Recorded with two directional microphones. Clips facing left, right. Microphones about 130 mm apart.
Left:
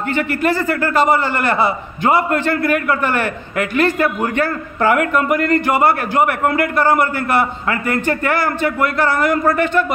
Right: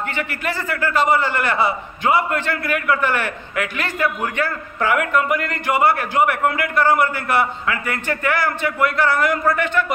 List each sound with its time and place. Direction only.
0.1 s a man's voice: 40° left (ahead or behind)